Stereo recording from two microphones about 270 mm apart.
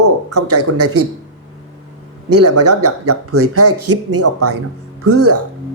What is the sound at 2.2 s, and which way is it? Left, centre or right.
A man's voice, right.